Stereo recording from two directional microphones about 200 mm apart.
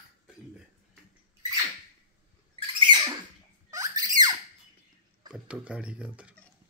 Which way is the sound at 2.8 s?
25° right (ahead or behind).